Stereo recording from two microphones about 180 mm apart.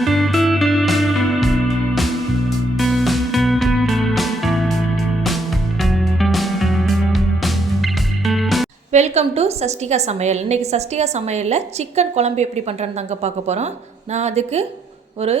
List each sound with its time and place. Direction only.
0.0 s music: centre (ahead or behind)
8.9 s a woman's voice: 40° right (ahead or behind)